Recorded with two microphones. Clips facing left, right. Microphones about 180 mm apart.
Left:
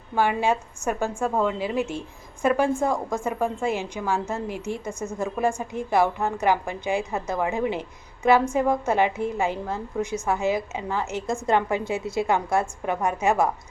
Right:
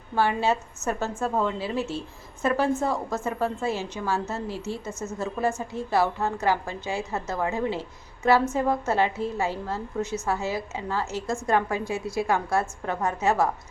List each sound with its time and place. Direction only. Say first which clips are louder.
0.2 s a woman's voice: left 1 dB; 15° left (ahead or behind)